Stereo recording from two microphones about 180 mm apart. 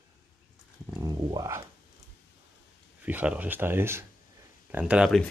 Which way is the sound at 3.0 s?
10° right (ahead or behind).